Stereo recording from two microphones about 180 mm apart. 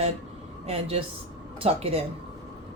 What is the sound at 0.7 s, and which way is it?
Speech, 35° right (ahead or behind).